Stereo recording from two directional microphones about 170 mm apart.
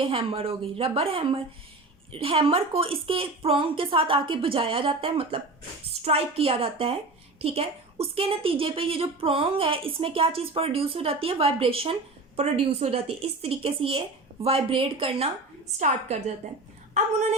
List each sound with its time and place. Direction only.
0.0 s a woman's voice: 30° right (ahead or behind)